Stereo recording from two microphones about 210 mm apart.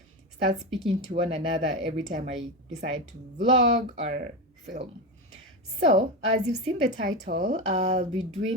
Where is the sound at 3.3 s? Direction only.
35° right (ahead or behind).